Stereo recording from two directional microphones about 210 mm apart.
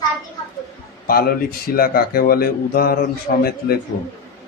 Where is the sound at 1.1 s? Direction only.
45° left (ahead or behind).